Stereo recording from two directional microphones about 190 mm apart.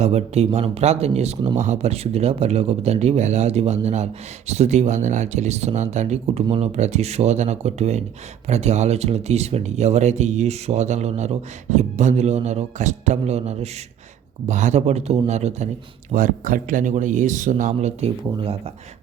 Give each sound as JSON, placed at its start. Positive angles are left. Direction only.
{"t": 0.0, "sound": "speech", "side_deg": -35}